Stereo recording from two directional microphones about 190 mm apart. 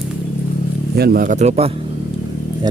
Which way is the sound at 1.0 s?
50° right (ahead or behind).